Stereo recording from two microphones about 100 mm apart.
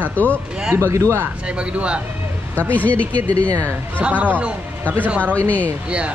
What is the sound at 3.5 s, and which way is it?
Speech, 30° right (ahead or behind).